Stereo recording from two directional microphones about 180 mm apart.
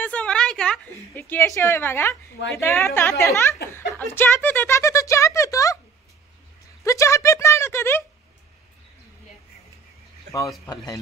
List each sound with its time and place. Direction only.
0.0 s a woman's voice: 5° left (ahead or behind)
3.7 s a sound: 10° left (ahead or behind)
6.8 s speech: 15° left (ahead or behind)